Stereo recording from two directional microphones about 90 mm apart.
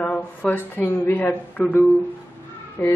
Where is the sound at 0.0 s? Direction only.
15° left (ahead or behind).